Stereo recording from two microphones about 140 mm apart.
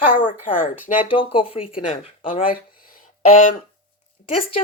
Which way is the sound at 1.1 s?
40° left (ahead or behind).